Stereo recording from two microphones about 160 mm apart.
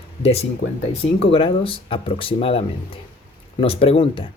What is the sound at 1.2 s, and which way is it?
Speech, 35° left (ahead or behind).